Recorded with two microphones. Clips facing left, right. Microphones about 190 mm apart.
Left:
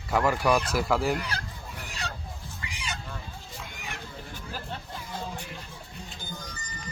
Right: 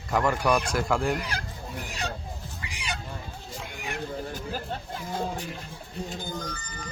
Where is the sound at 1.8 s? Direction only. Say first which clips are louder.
Right 3 dB; 15° right (ahead or behind).